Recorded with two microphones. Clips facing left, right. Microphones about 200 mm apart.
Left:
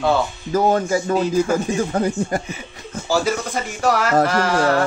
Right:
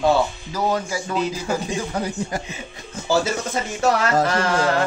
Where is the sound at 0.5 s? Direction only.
50° left (ahead or behind).